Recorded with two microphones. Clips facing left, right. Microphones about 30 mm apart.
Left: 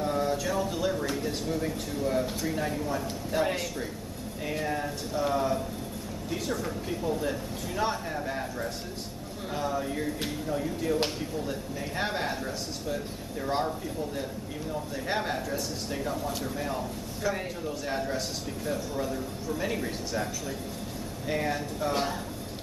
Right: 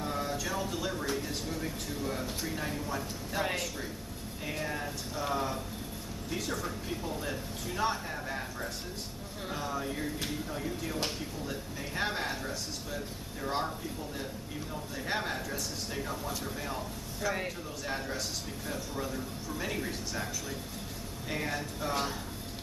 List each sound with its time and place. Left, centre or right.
0.0 s a sound: centre
1.1 s a man's voice: centre
21.3 s a man's voice: centre